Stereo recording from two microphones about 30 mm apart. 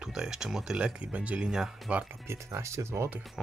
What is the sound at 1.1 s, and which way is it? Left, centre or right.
Speech, right.